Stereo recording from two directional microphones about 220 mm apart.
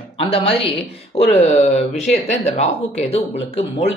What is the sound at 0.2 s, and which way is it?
Speech, 25° left (ahead or behind).